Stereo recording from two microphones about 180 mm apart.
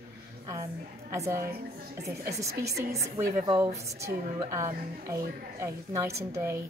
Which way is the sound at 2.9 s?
25° right (ahead or behind).